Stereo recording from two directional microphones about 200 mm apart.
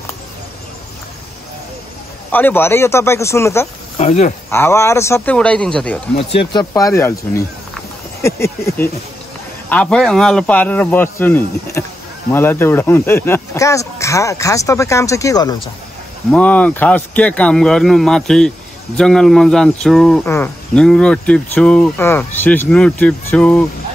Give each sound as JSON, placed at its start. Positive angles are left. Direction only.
{"t": 2.3, "sound": "speech", "side_deg": 10}
{"t": 4.0, "sound": "speech", "side_deg": 35}
{"t": 4.5, "sound": "speech", "side_deg": 10}
{"t": 6.1, "sound": "speech", "side_deg": 30}
{"t": 6.7, "sound": "speech", "side_deg": 15}
{"t": 16.3, "sound": "speech", "side_deg": 5}